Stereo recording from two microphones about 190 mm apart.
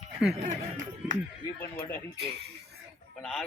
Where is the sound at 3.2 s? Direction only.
5° left (ahead or behind).